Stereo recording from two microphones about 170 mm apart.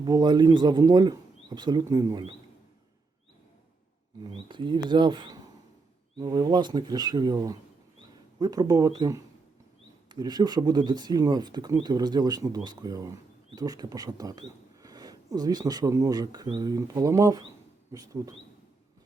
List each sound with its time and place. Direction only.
0.0 s speech: 25° right (ahead or behind)
4.2 s speech: 25° right (ahead or behind)